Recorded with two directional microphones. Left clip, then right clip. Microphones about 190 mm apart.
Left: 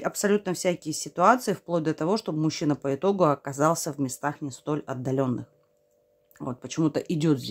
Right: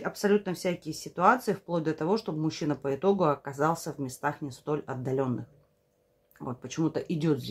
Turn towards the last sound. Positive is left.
turn(degrees=40)  # may be behind; listen again after turning